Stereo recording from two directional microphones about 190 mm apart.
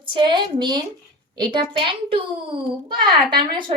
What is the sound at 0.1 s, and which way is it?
Speech, 25° right (ahead or behind).